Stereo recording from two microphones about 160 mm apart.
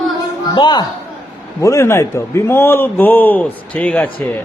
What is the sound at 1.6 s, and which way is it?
A man's voice, 15° left (ahead or behind).